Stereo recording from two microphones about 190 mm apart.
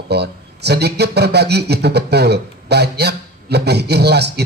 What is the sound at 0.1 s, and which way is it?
Speech, 60° right (ahead or behind).